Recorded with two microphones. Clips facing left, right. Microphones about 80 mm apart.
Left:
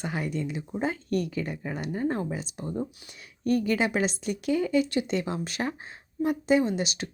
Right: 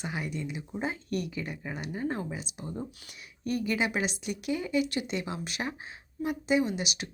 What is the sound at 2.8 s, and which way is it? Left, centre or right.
A woman's voice, left.